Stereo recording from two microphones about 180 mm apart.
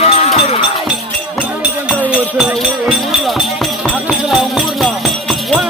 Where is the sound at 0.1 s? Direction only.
35° left (ahead or behind).